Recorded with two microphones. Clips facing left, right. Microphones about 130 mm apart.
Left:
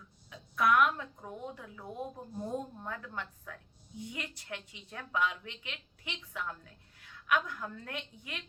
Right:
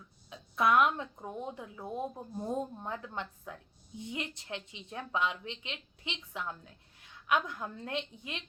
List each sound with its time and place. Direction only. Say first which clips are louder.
0.3 s a woman's voice: right 1 dB; 25° right (ahead or behind)